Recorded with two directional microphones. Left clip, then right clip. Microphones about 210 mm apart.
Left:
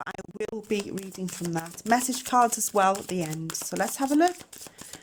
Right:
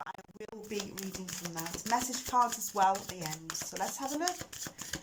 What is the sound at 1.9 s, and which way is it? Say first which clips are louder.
Speech: left 7 dB; 50° left (ahead or behind).